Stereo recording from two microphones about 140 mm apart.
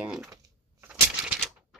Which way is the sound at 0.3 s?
20° right (ahead or behind).